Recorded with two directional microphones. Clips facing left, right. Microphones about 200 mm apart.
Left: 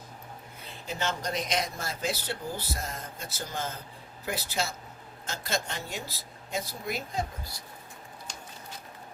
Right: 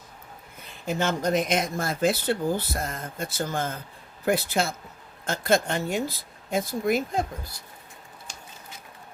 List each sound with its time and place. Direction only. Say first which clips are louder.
0.9 s speech: right 8 dB; 50° right (ahead or behind)